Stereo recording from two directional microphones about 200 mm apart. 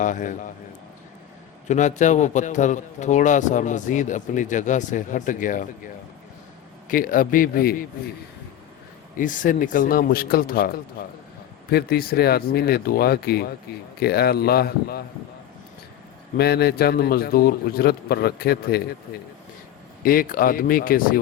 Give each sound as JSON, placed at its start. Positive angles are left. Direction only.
{"t": 0.0, "sound": "a man's voice", "side_deg": 40}
{"t": 1.6, "sound": "a man's voice", "side_deg": 35}
{"t": 6.8, "sound": "a man's voice", "side_deg": 45}
{"t": 9.1, "sound": "a man's voice", "side_deg": 40}
{"t": 11.7, "sound": "a man's voice", "side_deg": 50}
{"t": 16.4, "sound": "a man's voice", "side_deg": 50}
{"t": 20.0, "sound": "a man's voice", "side_deg": 45}